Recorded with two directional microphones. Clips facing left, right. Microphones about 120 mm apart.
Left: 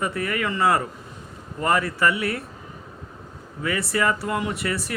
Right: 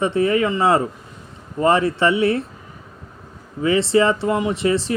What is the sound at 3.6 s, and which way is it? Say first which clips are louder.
Speech: right 7 dB; 25° right (ahead or behind).